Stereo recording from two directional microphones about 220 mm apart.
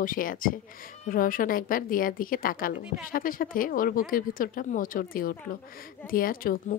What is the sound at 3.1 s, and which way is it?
A woman's voice, 40° left (ahead or behind).